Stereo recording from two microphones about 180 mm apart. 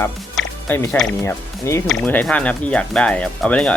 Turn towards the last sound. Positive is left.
turn(degrees=5)  # may be behind; listen again after turning